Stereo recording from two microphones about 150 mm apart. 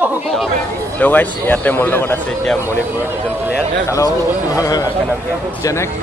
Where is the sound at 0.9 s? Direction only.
10° left (ahead or behind).